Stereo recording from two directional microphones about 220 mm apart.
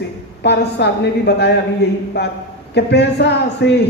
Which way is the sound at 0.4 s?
50° left (ahead or behind).